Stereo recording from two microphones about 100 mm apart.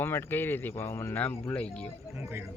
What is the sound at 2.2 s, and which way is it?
Speech, 25° right (ahead or behind).